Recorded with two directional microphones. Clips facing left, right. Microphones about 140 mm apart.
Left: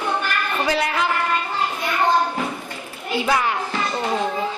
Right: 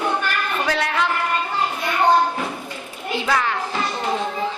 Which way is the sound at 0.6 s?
5° left (ahead or behind).